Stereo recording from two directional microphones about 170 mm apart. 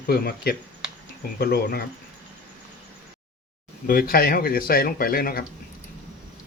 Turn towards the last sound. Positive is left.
turn(degrees=60)  # may be behind; listen again after turning